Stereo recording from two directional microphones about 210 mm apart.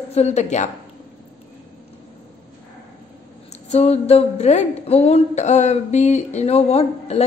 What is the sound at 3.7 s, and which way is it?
Speech, 30° left (ahead or behind).